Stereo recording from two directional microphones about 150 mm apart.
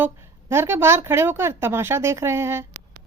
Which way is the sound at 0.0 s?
15° right (ahead or behind).